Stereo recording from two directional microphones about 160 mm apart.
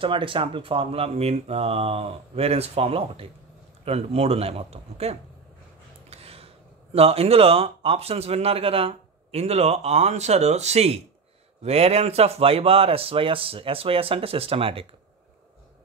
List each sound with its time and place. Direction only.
0.0 s speech: 35° right (ahead or behind)